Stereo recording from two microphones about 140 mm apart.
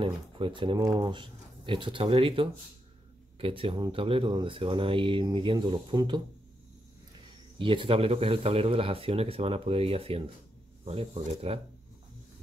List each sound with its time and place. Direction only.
0.0 s speech: 35° right (ahead or behind)
7.5 s speech: 35° right (ahead or behind)